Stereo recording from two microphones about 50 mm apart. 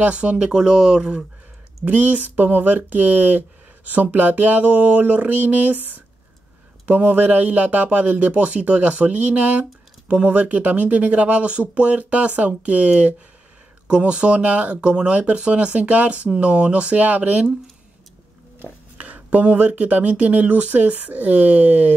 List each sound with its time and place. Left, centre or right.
0.0 s speech: right
1.9 s a sound: right
6.9 s speech: right
18.9 s speech: right